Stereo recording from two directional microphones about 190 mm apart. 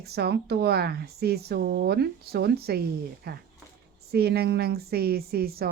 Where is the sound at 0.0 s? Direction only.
60° right (ahead or behind).